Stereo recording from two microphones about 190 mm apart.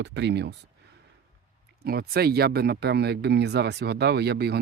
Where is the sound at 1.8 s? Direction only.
55° right (ahead or behind).